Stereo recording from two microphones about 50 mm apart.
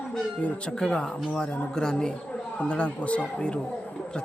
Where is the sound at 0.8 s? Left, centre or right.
Centre.